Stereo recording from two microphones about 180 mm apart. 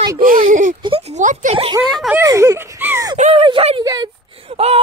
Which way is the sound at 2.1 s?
15° right (ahead or behind).